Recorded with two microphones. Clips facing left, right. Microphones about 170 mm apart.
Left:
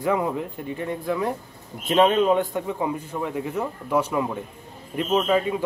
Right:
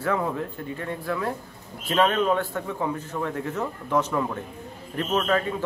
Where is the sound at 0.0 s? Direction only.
15° left (ahead or behind).